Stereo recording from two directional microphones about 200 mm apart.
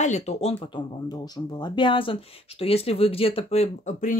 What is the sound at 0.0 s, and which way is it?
Speech, 35° left (ahead or behind).